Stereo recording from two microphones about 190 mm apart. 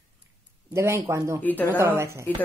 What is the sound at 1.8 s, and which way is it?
Speech, 15° right (ahead or behind).